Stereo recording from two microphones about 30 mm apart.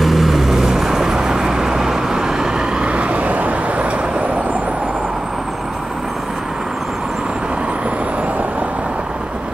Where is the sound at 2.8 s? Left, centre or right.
Right.